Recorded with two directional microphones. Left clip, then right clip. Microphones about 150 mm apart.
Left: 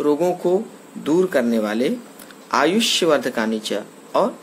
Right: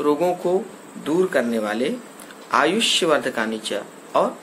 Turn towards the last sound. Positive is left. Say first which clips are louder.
# left 1 dB
turn(degrees=90)